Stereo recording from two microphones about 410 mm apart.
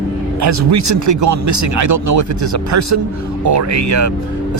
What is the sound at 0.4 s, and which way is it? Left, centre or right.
Speech, right.